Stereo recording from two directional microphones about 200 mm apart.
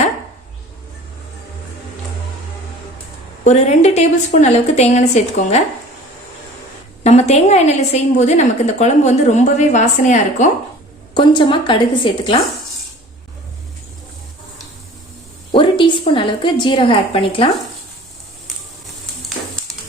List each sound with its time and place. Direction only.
3.4 s a woman's voice: 35° left (ahead or behind)
7.0 s a woman's voice: 35° left (ahead or behind)
11.1 s a woman's voice: 25° left (ahead or behind)
15.8 s a woman's voice: 25° left (ahead or behind)